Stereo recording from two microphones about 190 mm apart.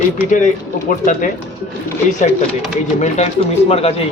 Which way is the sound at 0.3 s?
40° left (ahead or behind).